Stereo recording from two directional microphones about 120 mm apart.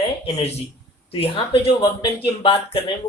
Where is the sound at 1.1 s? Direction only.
50° left (ahead or behind).